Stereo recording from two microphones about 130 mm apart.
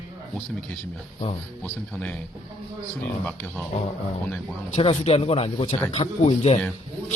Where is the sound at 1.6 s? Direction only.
5° left (ahead or behind).